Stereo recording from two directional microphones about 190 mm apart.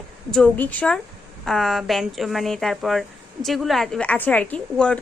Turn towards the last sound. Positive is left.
turn(degrees=5)  # may be behind; listen again after turning